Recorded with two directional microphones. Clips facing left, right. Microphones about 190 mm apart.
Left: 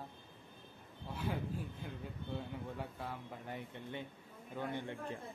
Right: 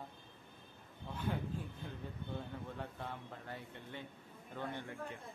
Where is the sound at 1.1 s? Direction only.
10° left (ahead or behind).